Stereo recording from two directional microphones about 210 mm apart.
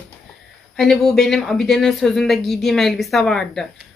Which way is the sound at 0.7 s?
Centre (ahead or behind).